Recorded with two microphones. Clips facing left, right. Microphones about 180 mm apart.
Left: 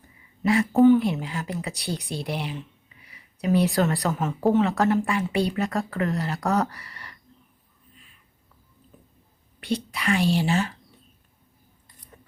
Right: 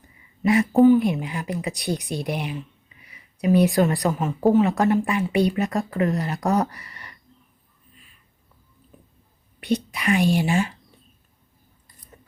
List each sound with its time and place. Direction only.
0.4 s a woman's voice: 20° right (ahead or behind)
9.6 s a woman's voice: 15° right (ahead or behind)
12.1 s scissors: 5° right (ahead or behind)